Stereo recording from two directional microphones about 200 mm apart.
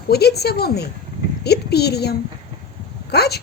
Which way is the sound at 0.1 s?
55° left (ahead or behind).